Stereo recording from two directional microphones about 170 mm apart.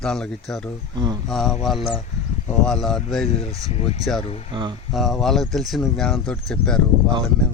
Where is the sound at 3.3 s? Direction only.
35° left (ahead or behind).